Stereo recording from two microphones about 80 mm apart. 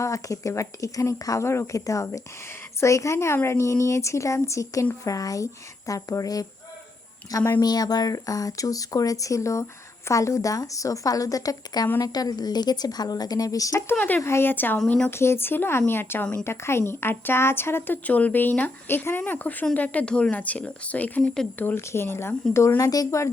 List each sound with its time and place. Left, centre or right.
0.0 s speech: left
7.6 s speech: left
14.2 s speech: left; by 21.4 s centre
21.6 s speech: left
22.8 s speech: left